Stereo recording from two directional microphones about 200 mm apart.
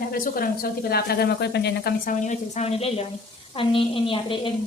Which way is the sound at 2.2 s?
30° left (ahead or behind).